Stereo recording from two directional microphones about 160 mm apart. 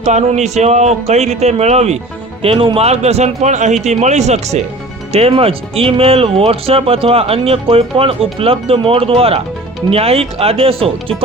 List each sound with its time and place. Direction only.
0.0 s speech: 45° right (ahead or behind)